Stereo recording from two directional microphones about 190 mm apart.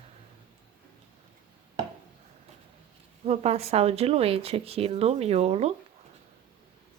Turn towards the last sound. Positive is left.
turn(degrees=-35)  # may be behind; listen again after turning